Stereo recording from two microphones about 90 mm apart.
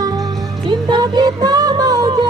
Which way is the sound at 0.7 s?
55° right (ahead or behind).